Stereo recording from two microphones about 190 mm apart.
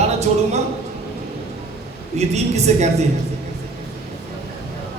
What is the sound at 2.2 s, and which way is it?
Speech, 35° right (ahead or behind).